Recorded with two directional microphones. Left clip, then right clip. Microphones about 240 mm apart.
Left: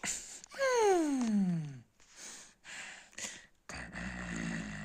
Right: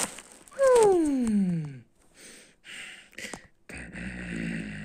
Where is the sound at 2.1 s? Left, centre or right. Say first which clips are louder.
Right 1 dB; left.